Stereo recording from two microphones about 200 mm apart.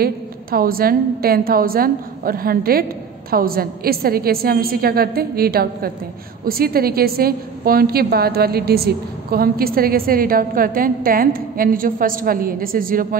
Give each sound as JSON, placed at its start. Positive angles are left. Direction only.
{"t": 0.0, "sound": "a woman's voice", "side_deg": -45}